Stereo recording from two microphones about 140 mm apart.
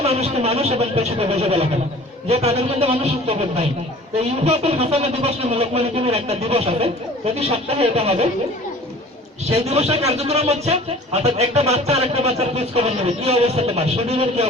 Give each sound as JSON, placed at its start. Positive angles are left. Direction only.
{"t": 0.0, "sound": "speech", "side_deg": -50}
{"t": 9.6, "sound": "speech", "side_deg": -45}